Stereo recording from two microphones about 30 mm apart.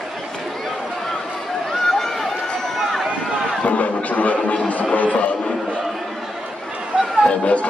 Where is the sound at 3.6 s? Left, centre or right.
Left.